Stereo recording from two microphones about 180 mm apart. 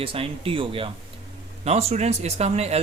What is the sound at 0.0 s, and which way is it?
Speech, 30° right (ahead or behind).